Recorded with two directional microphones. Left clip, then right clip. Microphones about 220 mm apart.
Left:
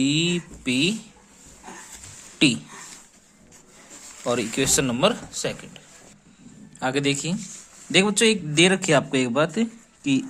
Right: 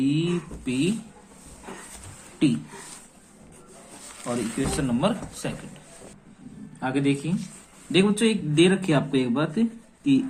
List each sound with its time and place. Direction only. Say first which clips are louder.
0.0 s speech: left 3 dB; 50° left (ahead or behind)
4.3 s speech: left 5 dB; 50° left (ahead or behind)
6.7 s speech: left 2 dB; 50° left (ahead or behind)